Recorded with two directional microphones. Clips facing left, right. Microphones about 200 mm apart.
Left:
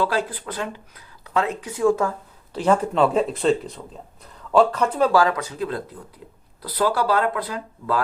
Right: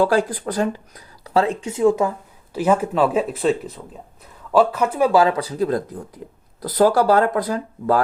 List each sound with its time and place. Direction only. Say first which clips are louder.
0.0 s speech: right 6 dB; 45° right (ahead or behind); by 2.1 s 20° right (ahead or behind)
2.5 s speech: right 1 dB; 10° right (ahead or behind)
5.1 s speech: right 3 dB; 25° right (ahead or behind); by 8.0 s 45° right (ahead or behind)